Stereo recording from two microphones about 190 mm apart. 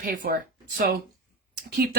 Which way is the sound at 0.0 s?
50° right (ahead or behind).